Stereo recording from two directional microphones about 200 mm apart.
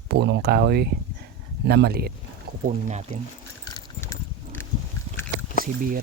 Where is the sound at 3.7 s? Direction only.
15° left (ahead or behind).